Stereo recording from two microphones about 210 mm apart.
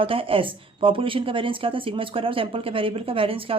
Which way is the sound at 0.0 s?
25° right (ahead or behind).